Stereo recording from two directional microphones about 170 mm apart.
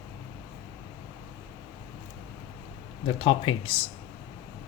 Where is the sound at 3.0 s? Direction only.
30° left (ahead or behind).